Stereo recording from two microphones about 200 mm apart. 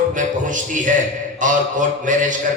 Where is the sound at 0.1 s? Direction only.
40° right (ahead or behind).